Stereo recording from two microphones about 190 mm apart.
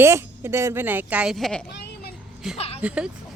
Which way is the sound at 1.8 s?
60° left (ahead or behind).